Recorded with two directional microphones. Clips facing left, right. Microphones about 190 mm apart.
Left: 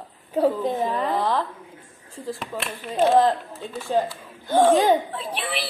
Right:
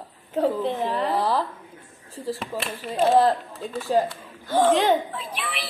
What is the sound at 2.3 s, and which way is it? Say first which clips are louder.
Speech: right 1 dB; centre (ahead or behind).